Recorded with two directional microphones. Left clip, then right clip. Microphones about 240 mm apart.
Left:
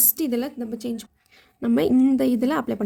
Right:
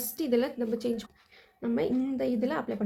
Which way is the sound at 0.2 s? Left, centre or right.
Left.